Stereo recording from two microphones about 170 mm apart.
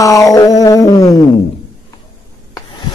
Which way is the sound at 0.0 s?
20° left (ahead or behind).